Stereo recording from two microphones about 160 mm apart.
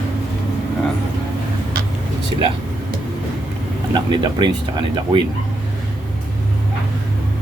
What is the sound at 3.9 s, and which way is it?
Speech, 25° right (ahead or behind).